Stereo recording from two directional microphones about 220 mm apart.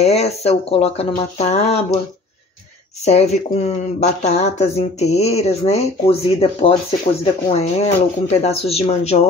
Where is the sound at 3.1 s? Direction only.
30° left (ahead or behind).